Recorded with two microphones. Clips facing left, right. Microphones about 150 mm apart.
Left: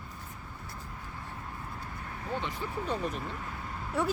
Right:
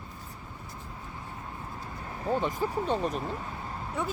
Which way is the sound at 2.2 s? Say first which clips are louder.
Right 7 dB; 40° right (ahead or behind).